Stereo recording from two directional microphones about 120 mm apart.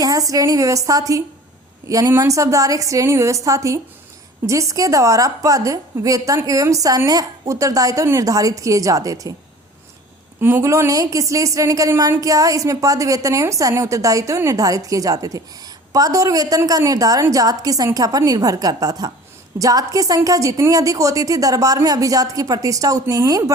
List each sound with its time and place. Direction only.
0.0 s a woman's voice: 30° right (ahead or behind)
10.4 s a woman's voice: 25° right (ahead or behind)